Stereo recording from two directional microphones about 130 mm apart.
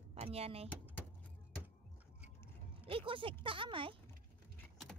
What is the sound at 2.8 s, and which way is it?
Speech, 45° right (ahead or behind).